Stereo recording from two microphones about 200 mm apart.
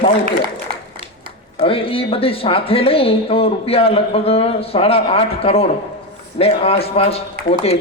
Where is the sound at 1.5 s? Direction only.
25° left (ahead or behind).